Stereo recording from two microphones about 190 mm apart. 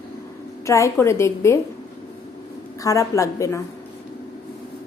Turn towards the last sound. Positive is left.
turn(degrees=15)  # may be behind; listen again after turning